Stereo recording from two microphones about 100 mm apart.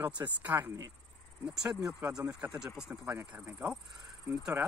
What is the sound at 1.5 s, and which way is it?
Speech, 5° right (ahead or behind).